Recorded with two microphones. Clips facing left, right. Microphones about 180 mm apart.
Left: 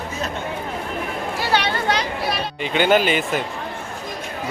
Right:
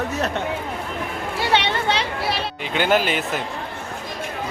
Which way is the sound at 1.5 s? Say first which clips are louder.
Even; 25° right (ahead or behind).